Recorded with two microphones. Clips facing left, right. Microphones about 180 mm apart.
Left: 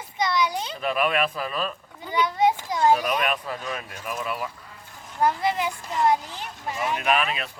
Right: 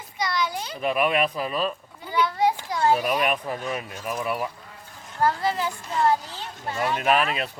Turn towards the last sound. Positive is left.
turn(degrees=-35)  # may be behind; listen again after turning